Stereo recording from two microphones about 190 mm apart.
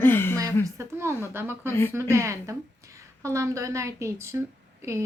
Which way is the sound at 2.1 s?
15° right (ahead or behind).